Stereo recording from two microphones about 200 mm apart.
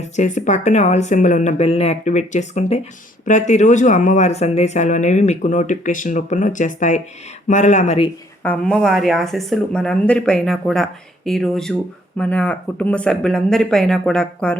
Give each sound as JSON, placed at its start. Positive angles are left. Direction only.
{"t": 0.2, "sound": "speech", "side_deg": 40}
{"t": 8.4, "sound": "speech", "side_deg": 5}